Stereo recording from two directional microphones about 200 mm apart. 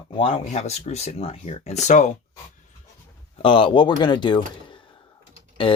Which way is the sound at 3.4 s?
25° left (ahead or behind).